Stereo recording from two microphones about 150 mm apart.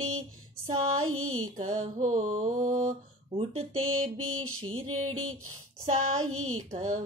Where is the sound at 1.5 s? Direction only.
55° right (ahead or behind).